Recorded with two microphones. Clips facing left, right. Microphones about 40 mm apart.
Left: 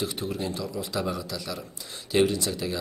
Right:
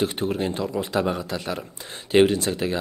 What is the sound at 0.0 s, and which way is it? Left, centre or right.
A man's voice, right.